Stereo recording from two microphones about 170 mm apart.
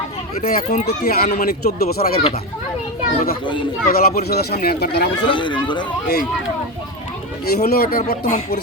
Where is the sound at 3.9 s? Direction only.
65° left (ahead or behind).